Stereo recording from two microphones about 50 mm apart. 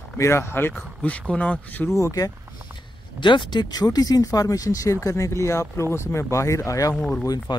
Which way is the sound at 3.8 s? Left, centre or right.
Left.